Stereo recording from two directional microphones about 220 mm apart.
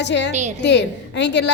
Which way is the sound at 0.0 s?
50° left (ahead or behind).